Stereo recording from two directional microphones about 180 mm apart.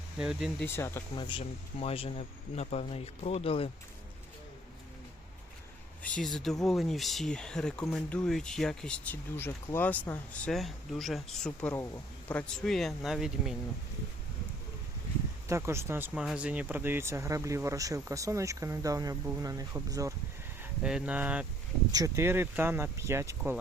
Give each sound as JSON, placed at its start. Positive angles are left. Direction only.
{"t": 0.2, "sound": "speech", "side_deg": -5}
{"t": 0.6, "sound": "speech", "side_deg": 15}
{"t": 1.1, "sound": "speech", "side_deg": 25}
{"t": 6.0, "sound": "speech", "side_deg": 5}
{"t": 15.4, "sound": "speech", "side_deg": -15}
{"t": 20.6, "sound": "speech", "side_deg": -5}